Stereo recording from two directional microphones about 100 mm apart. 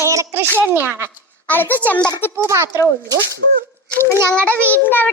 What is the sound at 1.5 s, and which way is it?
Speech, 20° left (ahead or behind).